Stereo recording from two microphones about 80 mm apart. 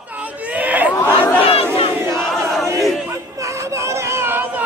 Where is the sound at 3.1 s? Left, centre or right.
Right.